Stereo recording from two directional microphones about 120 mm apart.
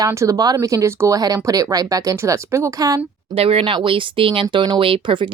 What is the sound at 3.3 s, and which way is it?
Speech, 50° right (ahead or behind).